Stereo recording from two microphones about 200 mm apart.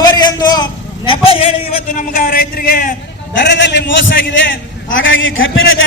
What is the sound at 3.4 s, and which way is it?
A man's voice, 60° left (ahead or behind).